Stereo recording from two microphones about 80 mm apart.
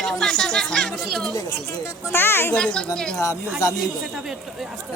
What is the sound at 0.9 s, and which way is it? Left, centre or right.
Speech, centre.